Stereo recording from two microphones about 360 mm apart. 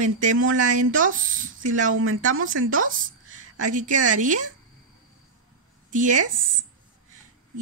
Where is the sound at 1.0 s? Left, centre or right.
Right.